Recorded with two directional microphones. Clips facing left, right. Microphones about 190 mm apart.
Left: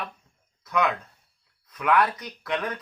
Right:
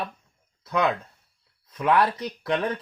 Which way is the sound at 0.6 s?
30° right (ahead or behind).